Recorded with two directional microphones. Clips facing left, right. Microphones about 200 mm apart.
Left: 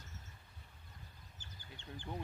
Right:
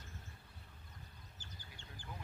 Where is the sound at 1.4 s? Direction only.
20° left (ahead or behind).